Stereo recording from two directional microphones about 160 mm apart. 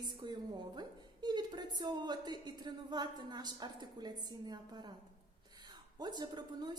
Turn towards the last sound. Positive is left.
turn(degrees=-25)  # may be behind; listen again after turning